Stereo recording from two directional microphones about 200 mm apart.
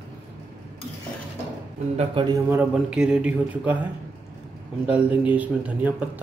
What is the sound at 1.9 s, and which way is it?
Speech, 25° right (ahead or behind).